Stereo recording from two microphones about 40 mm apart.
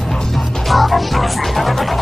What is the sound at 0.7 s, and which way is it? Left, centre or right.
Music, centre.